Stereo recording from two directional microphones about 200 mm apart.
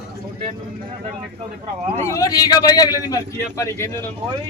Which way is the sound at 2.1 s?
15° left (ahead or behind).